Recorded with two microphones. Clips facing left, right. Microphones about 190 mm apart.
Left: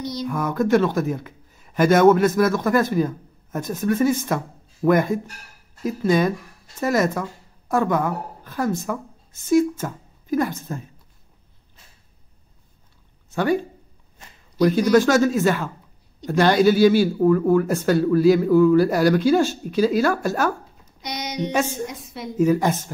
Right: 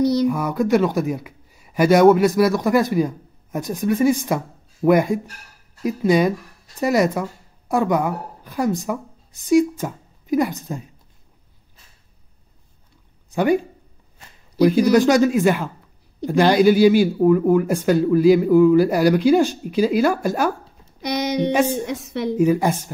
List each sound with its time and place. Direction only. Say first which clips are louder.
0.3 s a woman's voice: right 1 dB; 10° right (ahead or behind)
13.3 s speech: right 3 dB; 15° right (ahead or behind)
14.6 s speech: right 2 dB; 10° right (ahead or behind)
21.5 s speech: right 1 dB; 15° right (ahead or behind)
21.9 s a woman's voice: right 9 dB; 75° right (ahead or behind)
22.4 s speech: even; 10° right (ahead or behind)